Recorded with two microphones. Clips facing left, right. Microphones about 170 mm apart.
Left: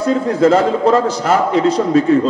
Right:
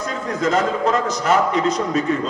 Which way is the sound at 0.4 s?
30° left (ahead or behind).